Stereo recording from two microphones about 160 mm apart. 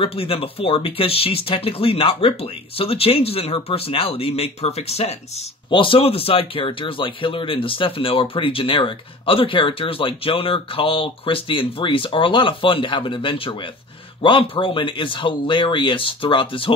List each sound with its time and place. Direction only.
0.0 s speech: 35° left (ahead or behind)